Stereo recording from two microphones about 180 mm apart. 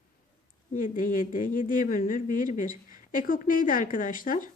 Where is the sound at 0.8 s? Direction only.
50° left (ahead or behind).